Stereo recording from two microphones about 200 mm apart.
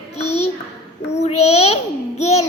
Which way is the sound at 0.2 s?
30° left (ahead or behind).